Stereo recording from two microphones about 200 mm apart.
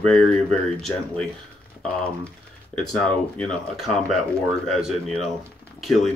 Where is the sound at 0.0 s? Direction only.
5° left (ahead or behind).